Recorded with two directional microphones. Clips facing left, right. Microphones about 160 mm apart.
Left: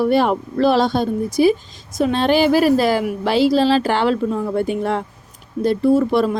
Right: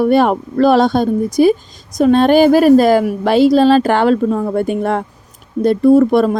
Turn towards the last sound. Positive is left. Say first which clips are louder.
# right 6 dB
turn(degrees=-50)  # may be behind; listen again after turning